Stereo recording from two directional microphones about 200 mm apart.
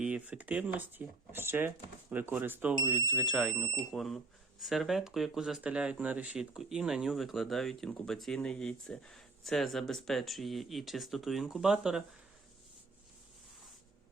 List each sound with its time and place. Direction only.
0.0 s speech: 5° right (ahead or behind)